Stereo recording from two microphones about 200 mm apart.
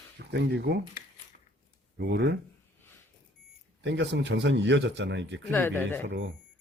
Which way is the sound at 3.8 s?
60° right (ahead or behind).